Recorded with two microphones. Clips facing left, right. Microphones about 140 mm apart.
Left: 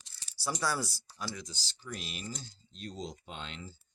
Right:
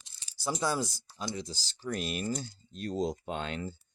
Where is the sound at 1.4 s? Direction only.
35° right (ahead or behind); by 3.7 s 55° right (ahead or behind).